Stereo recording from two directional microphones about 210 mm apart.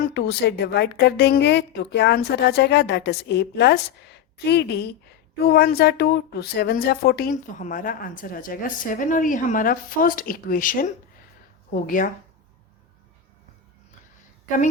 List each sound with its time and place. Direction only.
0.0 s a woman's voice: 50° left (ahead or behind)